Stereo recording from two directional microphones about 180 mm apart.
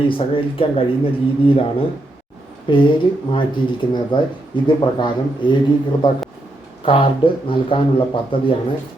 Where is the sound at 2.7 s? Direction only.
25° left (ahead or behind).